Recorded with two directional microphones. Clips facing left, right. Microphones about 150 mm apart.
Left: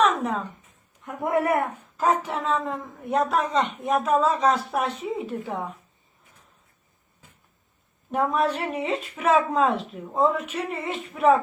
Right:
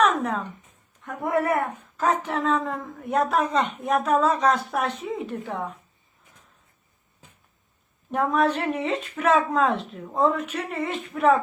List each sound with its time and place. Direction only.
0.0 s a sound: centre (ahead or behind)
1.0 s a man's voice: 20° left (ahead or behind)
2.0 s a woman's voice: 5° left (ahead or behind)
8.1 s a woman's voice: centre (ahead or behind)